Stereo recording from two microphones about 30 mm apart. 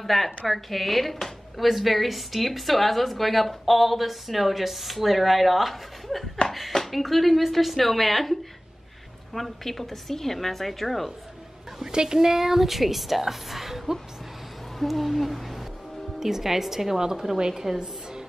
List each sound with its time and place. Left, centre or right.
0.0 s a woman's voice: centre
11.9 s speech: right; by 15.6 s centre
16.2 s speech: centre
17.0 s a woman's voice: right